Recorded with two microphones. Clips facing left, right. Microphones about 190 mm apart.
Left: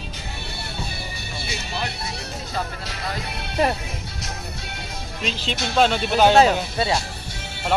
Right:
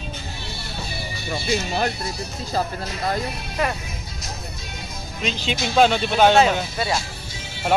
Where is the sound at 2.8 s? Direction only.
75° left (ahead or behind).